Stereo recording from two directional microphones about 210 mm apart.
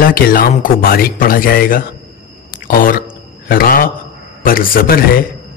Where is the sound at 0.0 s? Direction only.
45° left (ahead or behind).